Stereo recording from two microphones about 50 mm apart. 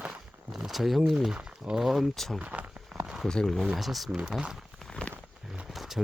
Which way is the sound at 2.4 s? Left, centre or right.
Right.